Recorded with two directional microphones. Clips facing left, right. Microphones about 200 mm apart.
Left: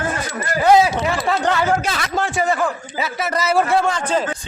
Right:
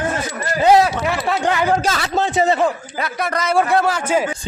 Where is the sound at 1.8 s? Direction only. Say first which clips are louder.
Right 3 dB; 30° right (ahead or behind).